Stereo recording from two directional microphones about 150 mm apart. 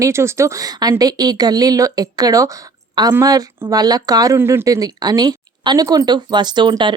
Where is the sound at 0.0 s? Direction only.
20° right (ahead or behind).